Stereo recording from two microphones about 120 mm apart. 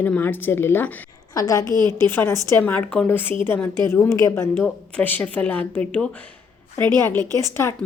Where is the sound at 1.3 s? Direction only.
30° left (ahead or behind).